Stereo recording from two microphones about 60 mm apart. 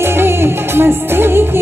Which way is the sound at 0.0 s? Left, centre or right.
Right.